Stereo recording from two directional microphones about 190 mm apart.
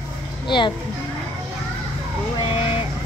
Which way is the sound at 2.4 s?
30° left (ahead or behind).